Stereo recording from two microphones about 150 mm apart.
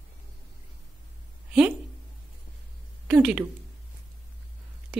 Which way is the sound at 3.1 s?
5° right (ahead or behind).